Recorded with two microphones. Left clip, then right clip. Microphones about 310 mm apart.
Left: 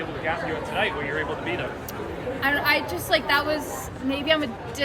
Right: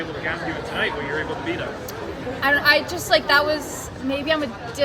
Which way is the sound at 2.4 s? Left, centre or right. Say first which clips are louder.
Right 5 dB; centre.